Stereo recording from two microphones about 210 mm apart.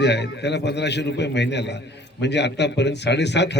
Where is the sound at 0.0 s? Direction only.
55° left (ahead or behind).